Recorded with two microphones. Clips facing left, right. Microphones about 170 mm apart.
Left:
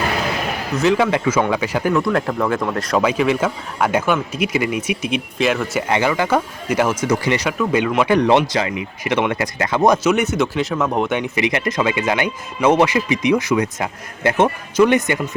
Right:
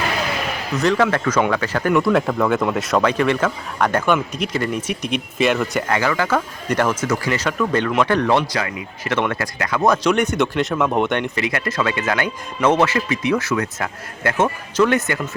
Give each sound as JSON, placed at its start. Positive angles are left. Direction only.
{"t": 0.8, "sound": "a man's voice", "side_deg": 5}
{"t": 1.9, "sound": "a man's voice", "side_deg": 0}
{"t": 5.9, "sound": "a man's voice", "side_deg": 20}
{"t": 10.0, "sound": "a man's voice", "side_deg": 5}
{"t": 11.3, "sound": "a man's voice", "side_deg": 20}